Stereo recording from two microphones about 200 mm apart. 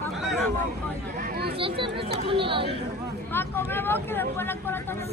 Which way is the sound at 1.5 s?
25° right (ahead or behind).